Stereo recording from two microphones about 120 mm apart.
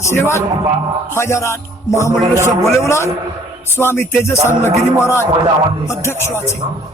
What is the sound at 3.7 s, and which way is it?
A man's voice, 20° left (ahead or behind).